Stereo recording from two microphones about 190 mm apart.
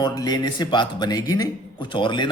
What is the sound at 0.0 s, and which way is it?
Speech, 20° left (ahead or behind).